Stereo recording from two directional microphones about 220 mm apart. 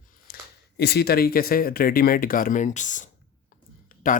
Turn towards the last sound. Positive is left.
turn(degrees=40)  # may be behind; listen again after turning